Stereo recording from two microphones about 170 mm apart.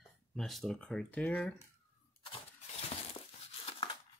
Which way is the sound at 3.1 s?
35° left (ahead or behind).